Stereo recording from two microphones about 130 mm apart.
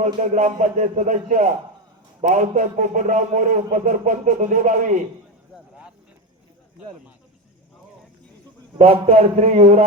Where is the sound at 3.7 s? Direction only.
80° right.